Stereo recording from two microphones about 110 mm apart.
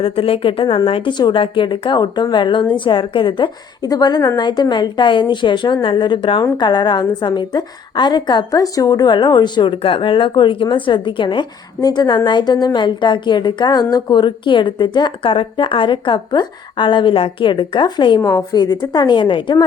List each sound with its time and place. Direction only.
0.0 s a woman's voice: 55° left (ahead or behind)
3.8 s a woman's voice: 35° left (ahead or behind)
18.2 s a woman's voice: 30° left (ahead or behind)